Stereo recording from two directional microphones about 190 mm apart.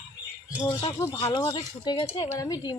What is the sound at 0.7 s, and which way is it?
Speech, 20° left (ahead or behind).